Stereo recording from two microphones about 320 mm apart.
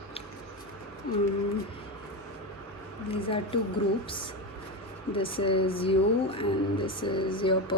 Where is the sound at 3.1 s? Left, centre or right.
Centre.